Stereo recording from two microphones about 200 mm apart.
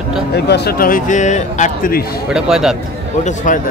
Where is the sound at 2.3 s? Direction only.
Centre (ahead or behind).